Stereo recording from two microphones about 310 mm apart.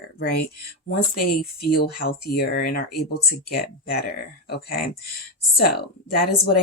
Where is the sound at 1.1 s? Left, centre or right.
Left.